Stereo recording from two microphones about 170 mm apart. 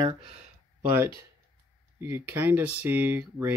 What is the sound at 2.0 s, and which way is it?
Speech, 15° right (ahead or behind).